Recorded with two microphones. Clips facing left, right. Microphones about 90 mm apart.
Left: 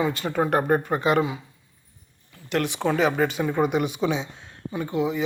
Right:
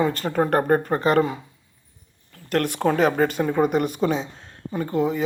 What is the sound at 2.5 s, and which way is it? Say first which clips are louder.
A man's voice: right 3 dB; 50° right (ahead or behind).